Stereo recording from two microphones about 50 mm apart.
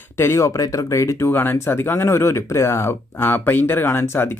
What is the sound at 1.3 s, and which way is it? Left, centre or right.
Speech, left.